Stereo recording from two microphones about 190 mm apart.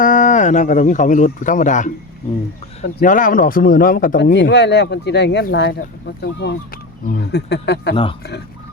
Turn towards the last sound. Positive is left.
turn(degrees=60)  # may be behind; listen again after turning